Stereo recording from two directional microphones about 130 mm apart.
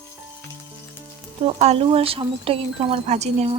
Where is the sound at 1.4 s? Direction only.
55° right (ahead or behind).